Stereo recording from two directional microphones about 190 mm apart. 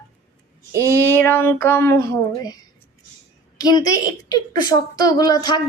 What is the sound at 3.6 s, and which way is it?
A woman's voice, 20° left (ahead or behind).